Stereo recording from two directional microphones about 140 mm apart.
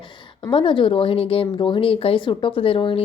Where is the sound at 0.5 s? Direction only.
35° left (ahead or behind).